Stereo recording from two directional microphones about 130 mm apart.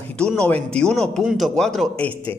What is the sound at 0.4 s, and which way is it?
A man's voice, 5° left (ahead or behind).